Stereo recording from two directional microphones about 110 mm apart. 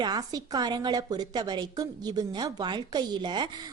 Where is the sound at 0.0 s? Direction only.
40° right (ahead or behind).